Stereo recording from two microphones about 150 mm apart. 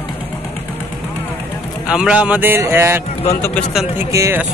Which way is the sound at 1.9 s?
5° right (ahead or behind).